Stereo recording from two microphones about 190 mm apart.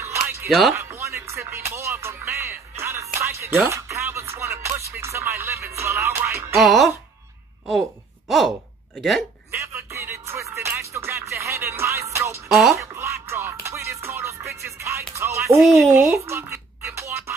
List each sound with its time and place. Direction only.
0.0 s music: 15° right (ahead or behind)
0.5 s speech: centre (ahead or behind)
0.7 s music: 15° right (ahead or behind)
6.5 s speech: centre (ahead or behind)
8.3 s speech: centre (ahead or behind)
9.5 s music: 15° right (ahead or behind)
12.4 s speech: centre (ahead or behind)
12.7 s music: 15° right (ahead or behind)
15.6 s speech: centre (ahead or behind)
15.9 s music: 15° right (ahead or behind)